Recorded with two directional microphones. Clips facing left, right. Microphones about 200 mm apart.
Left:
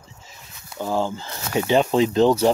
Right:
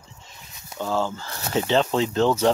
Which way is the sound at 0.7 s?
15° left (ahead or behind).